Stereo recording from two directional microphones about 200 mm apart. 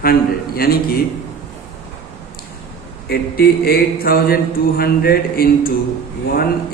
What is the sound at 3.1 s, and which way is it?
Mantra, 50° left (ahead or behind).